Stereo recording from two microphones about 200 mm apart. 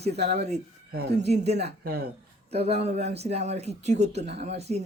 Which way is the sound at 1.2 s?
35° right (ahead or behind).